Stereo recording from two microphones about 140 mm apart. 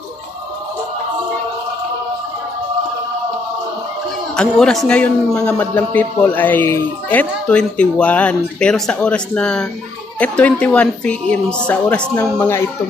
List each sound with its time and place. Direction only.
4.4 s a man's voice: 5° left (ahead or behind)